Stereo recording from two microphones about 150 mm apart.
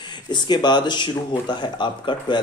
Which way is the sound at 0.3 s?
30° left (ahead or behind).